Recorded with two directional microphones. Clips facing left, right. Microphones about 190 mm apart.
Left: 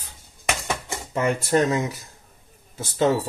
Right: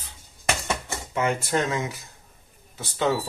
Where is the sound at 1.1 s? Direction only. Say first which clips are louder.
Left 3 dB; 40° left (ahead or behind).